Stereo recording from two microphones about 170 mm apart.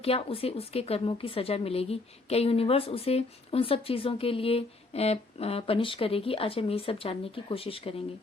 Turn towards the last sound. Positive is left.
turn(degrees=35)  # may be behind; listen again after turning